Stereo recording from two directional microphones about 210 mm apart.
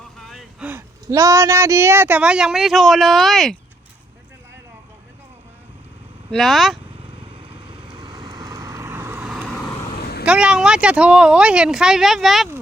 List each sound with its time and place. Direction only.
0.2 s vehicle: centre (ahead or behind)
0.7 s speech: 15° right (ahead or behind)
6.3 s speech: centre (ahead or behind)
7.3 s vehicle: 25° right (ahead or behind); by 9.5 s 5° right (ahead or behind)
10.0 s vehicle: 50° left (ahead or behind)
10.2 s speech: 5° right (ahead or behind)